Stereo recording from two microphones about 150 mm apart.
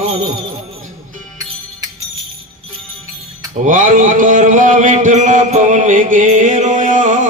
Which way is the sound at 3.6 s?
60° right (ahead or behind).